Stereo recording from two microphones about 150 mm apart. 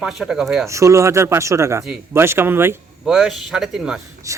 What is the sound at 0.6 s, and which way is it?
Speech, 20° right (ahead or behind).